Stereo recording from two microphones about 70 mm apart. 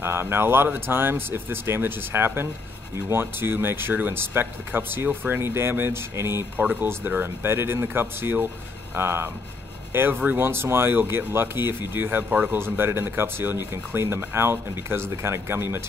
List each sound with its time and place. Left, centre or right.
0.0 s speech: right
6.6 s speech: right